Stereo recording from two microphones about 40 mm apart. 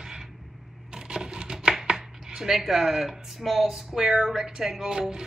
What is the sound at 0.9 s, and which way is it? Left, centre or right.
Patter, right.